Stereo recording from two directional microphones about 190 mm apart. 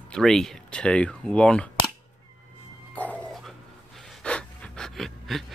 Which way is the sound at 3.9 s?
5° left (ahead or behind).